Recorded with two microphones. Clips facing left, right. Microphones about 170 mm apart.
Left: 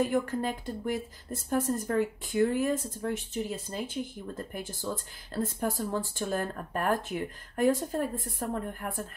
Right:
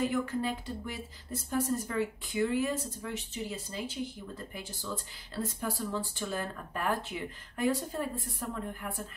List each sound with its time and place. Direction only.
0.0 s speech: 50° left (ahead or behind)